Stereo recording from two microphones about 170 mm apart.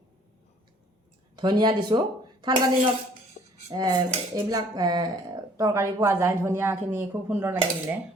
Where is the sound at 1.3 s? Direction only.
25° right (ahead or behind).